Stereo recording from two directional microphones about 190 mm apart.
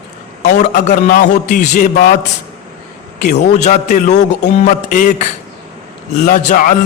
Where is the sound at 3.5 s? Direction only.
40° left (ahead or behind).